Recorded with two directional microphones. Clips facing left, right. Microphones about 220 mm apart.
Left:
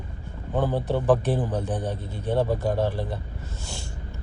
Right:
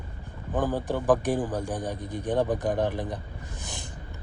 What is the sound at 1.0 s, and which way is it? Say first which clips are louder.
A man's voice: even; 15° right (ahead or behind).